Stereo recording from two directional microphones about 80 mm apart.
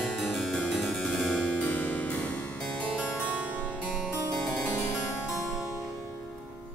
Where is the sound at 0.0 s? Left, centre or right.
Centre.